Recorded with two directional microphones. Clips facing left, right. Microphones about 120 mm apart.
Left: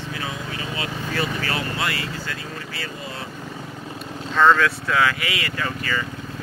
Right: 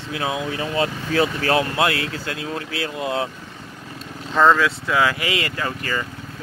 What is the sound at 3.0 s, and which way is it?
Speech, 80° right.